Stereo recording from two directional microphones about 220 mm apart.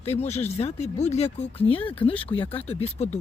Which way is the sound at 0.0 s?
30° left (ahead or behind).